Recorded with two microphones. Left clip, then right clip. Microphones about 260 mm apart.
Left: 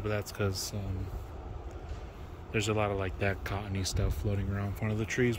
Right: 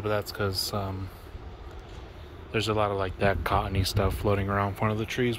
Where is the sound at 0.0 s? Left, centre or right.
Centre.